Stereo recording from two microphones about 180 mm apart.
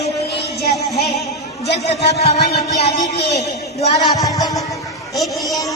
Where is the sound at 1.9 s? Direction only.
35° left (ahead or behind).